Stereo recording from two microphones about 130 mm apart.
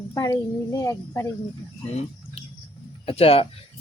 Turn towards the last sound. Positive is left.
turn(degrees=50)  # may be behind; listen again after turning